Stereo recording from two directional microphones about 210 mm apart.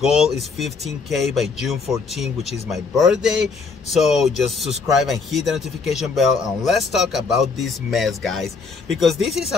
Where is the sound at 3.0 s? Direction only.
5° right (ahead or behind).